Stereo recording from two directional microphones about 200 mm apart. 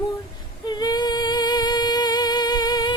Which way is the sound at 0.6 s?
20° left (ahead or behind).